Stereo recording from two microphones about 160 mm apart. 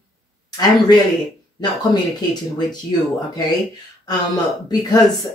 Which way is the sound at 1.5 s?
25° left (ahead or behind).